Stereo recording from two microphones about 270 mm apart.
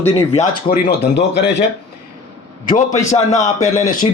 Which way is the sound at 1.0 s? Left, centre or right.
Left.